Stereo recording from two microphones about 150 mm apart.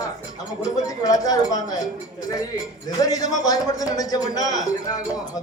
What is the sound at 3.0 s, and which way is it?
A man's voice, 25° left (ahead or behind).